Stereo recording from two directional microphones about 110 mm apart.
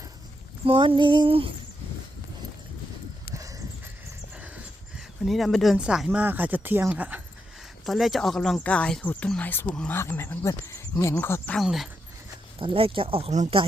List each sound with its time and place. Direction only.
0.6 s a sound: 55° right (ahead or behind)
3.3 s a sound: 30° right (ahead or behind)
5.2 s speech: centre (ahead or behind)
7.9 s speech: centre (ahead or behind); by 11.5 s 20° left (ahead or behind)
11.5 s speech: centre (ahead or behind)
12.5 s speech: 55° right (ahead or behind); by 13.6 s 75° right (ahead or behind)